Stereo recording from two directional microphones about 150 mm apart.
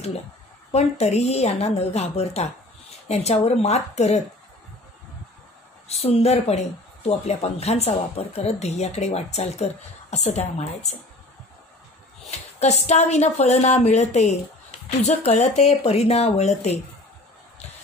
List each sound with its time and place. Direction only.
0.7 s speech: 45° left (ahead or behind)
5.9 s speech: 45° left (ahead or behind)
12.3 s speech: 45° left (ahead or behind)